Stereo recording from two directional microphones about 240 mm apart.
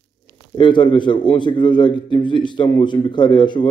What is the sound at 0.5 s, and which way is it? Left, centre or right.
A man's voice, centre.